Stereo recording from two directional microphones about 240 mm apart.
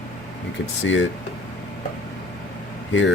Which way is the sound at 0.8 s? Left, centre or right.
Left.